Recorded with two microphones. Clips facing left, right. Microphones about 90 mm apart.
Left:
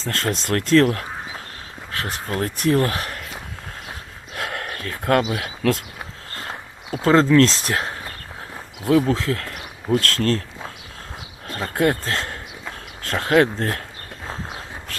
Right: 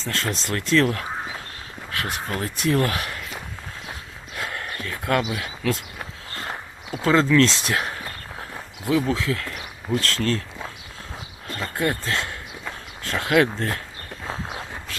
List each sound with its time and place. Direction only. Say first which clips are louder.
0.0 s speech: left 3 dB; 45° left (ahead or behind)
0.3 s speech: left 6 dB; 60° left (ahead or behind)
0.8 s speech: left 3 dB; 40° left (ahead or behind)
2.4 s speech: left 5 dB; 45° left (ahead or behind)
2.8 s speech: left 1 dB; 35° left (ahead or behind)
4.4 s speech: left 2 dB; 65° left (ahead or behind)
6.9 s speech: left 3 dB; 40° left (ahead or behind)
11.7 s speech: left 5 dB; 60° left (ahead or behind)
12.0 s speech: left 1 dB; 40° left (ahead or behind)